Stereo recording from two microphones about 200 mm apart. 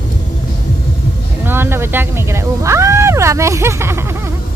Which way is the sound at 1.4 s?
10° right (ahead or behind).